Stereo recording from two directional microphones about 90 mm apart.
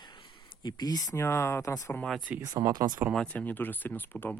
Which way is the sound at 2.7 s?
50° right (ahead or behind).